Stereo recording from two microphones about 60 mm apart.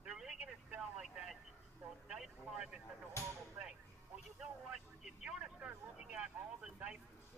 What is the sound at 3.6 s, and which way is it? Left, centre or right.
Music, centre.